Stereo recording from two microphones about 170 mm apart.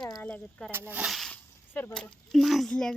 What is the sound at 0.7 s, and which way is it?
Speech, 10° right (ahead or behind).